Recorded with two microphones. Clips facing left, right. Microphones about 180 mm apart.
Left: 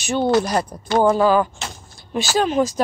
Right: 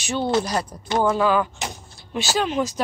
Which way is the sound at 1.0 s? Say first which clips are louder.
Left 4 dB; 40° left (ahead or behind).